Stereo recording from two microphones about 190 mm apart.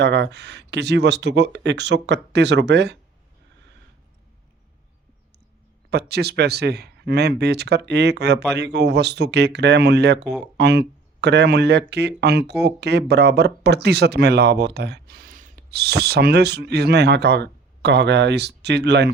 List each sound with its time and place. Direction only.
0.0 s speech: 65° right (ahead or behind)
5.9 s speech: 60° right (ahead or behind)